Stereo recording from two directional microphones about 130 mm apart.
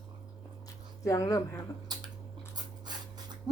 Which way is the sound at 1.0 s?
25° left (ahead or behind).